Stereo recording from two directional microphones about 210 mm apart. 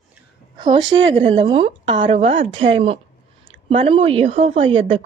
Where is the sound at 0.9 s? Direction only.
25° right (ahead or behind).